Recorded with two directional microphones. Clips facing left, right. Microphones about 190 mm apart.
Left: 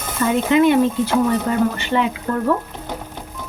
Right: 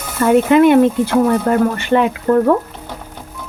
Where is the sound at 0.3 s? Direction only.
55° right (ahead or behind).